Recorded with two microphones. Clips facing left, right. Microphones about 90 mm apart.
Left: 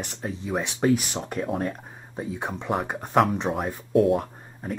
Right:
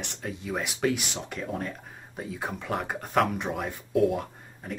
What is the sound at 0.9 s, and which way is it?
Speech, 40° left (ahead or behind).